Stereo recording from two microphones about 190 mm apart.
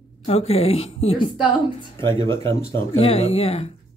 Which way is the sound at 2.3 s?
15° left (ahead or behind).